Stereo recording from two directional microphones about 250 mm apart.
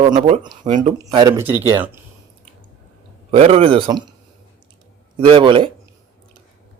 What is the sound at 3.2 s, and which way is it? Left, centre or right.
Speech, right.